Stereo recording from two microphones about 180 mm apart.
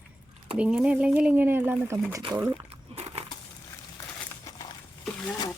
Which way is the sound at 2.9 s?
35° right (ahead or behind).